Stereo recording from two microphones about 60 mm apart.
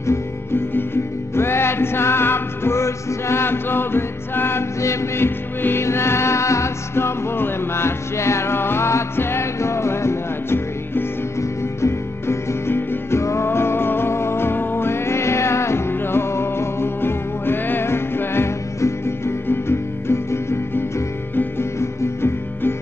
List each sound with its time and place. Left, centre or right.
1.3 s music: left